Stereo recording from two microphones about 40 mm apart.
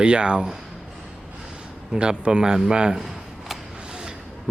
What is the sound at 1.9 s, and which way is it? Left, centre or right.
Speech, right.